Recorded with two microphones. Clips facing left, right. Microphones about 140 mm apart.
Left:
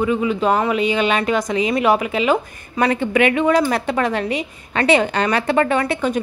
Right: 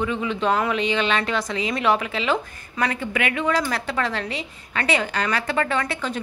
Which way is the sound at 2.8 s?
25° left (ahead or behind).